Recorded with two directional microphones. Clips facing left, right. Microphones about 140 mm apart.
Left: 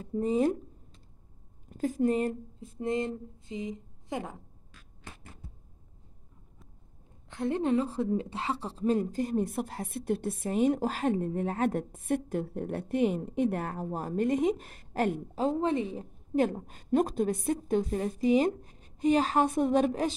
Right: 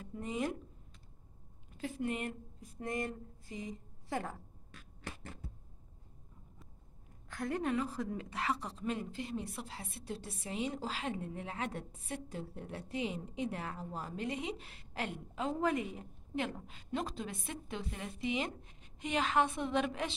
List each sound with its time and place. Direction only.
0.0 s speech: 35° left (ahead or behind)
1.7 s speech: 45° left (ahead or behind); by 4.4 s 20° left (ahead or behind)
7.2 s speech: 25° left (ahead or behind)
16.3 s a woman's voice: 40° left (ahead or behind)